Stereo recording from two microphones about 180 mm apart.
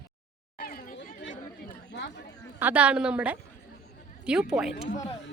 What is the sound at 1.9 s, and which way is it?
Chatter, 75° left (ahead or behind).